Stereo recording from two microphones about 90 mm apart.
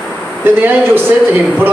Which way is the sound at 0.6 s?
25° right (ahead or behind).